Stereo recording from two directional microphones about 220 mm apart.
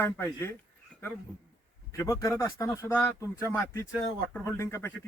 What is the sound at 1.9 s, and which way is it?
Speech, 15° left (ahead or behind).